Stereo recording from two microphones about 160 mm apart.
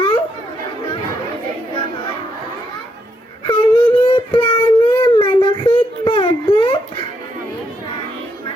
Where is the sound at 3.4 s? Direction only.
30° left (ahead or behind).